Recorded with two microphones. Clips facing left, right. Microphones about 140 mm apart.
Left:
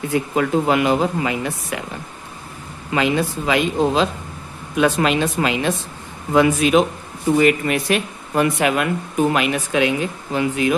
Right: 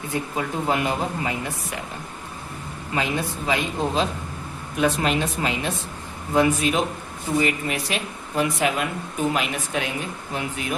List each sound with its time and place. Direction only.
0.1 s speech: 90° left
2.9 s speech: 90° left
7.3 s speech: 70° left (ahead or behind)
9.3 s speech: 80° left